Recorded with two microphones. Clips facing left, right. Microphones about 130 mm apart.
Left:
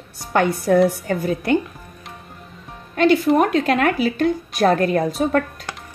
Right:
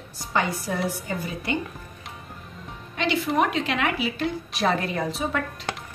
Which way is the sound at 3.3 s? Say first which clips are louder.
Left 7 dB; 45° left (ahead or behind).